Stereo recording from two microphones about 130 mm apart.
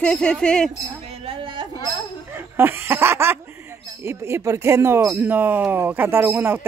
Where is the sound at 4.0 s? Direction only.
20° right (ahead or behind).